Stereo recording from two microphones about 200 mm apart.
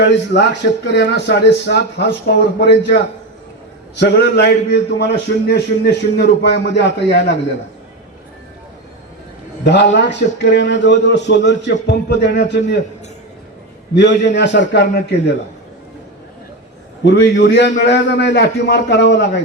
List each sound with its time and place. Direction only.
0.0 s a man's voice: 60° left (ahead or behind)
9.6 s a man's voice: 60° left (ahead or behind)
13.9 s a man's voice: 60° left (ahead or behind)
17.0 s a man's voice: 60° left (ahead or behind)